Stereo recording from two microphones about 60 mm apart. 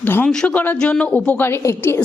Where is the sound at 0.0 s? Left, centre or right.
Left.